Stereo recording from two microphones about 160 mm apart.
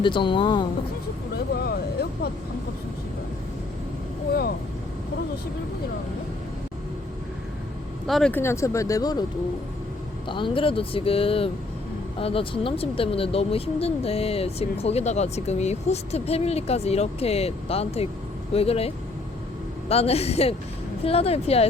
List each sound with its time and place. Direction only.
0.0 s speech: 30° left (ahead or behind)
1.6 s speech: 80° left
8.0 s speech: 5° left (ahead or behind)
8.4 s speech: 15° left (ahead or behind)
10.2 s speech: 30° left (ahead or behind)
19.9 s speech: 40° left (ahead or behind)